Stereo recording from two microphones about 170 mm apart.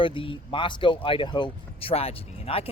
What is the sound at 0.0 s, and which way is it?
Speech, 30° left (ahead or behind).